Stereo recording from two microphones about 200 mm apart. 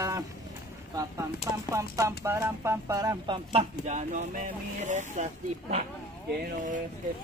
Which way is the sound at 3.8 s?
35° right (ahead or behind).